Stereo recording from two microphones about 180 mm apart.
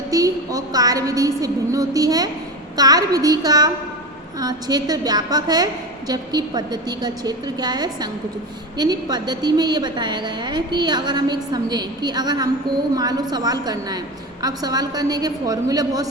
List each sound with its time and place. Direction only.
0.1 s a woman's voice: 20° right (ahead or behind)